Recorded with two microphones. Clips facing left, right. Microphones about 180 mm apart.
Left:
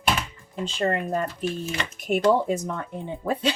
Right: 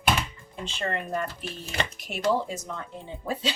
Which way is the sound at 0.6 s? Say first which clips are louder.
Left 6 dB; 40° left (ahead or behind).